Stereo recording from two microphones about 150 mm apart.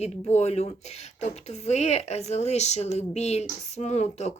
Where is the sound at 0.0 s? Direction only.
45° left (ahead or behind).